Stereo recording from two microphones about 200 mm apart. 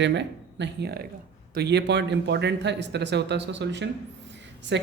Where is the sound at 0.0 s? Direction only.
60° right (ahead or behind).